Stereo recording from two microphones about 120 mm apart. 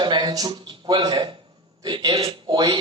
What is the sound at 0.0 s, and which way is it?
A man's voice, 40° right (ahead or behind).